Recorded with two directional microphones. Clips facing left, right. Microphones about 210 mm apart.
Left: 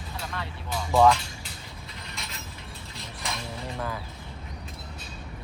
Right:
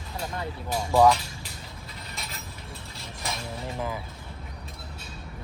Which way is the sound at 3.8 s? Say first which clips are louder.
Right 1 dB; 15° right (ahead or behind).